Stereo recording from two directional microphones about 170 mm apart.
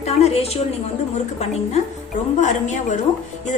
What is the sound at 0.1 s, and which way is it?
Speech, 35° left (ahead or behind).